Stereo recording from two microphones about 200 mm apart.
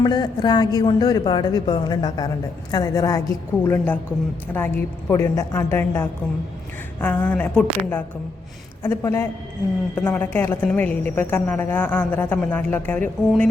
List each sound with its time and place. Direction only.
0.0 s a woman's voice: 20° left (ahead or behind)